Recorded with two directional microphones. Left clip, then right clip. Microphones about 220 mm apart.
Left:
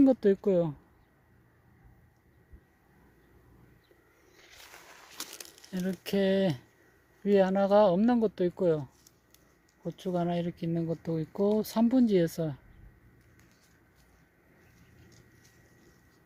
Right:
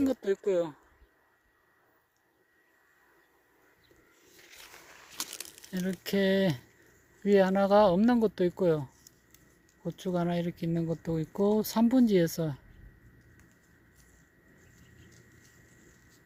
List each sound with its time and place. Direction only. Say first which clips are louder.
0.0 s speech: left 5 dB; centre (ahead or behind)
5.1 s a sound: right 4 dB; 25° right (ahead or behind)
5.7 s speech: even; 5° left (ahead or behind)